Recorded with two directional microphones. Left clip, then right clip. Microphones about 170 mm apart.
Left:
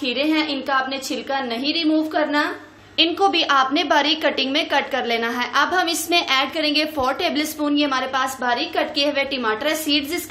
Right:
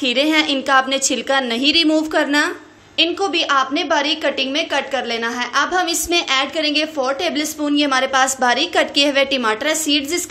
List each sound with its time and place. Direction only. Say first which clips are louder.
0.0 s a woman's voice: right 5 dB; 30° right (ahead or behind)
3.0 s a woman's voice: even; 5° right (ahead or behind); by 9.8 s 30° right (ahead or behind)